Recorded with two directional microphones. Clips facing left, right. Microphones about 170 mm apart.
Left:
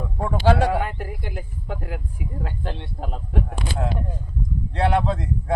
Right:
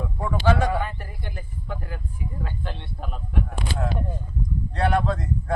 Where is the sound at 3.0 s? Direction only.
35° left (ahead or behind).